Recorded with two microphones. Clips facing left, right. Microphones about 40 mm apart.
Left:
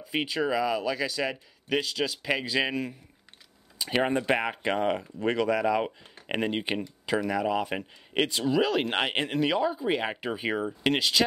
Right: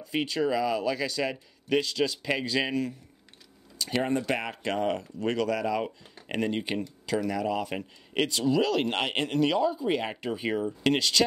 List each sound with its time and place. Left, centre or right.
0.0 s speech: centre
3.7 s speech: left